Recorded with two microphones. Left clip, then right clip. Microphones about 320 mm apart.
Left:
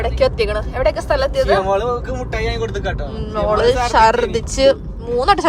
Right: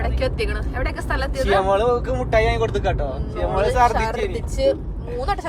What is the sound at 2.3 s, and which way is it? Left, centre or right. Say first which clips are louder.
Speech: right 4 dB; centre.